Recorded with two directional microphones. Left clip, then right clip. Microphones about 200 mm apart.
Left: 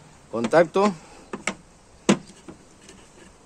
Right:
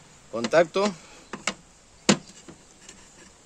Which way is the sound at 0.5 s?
30° left (ahead or behind).